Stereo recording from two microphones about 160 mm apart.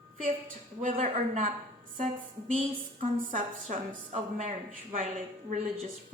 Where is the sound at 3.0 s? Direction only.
55° right (ahead or behind).